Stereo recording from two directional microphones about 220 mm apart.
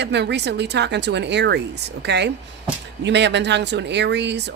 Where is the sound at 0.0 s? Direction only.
50° right (ahead or behind).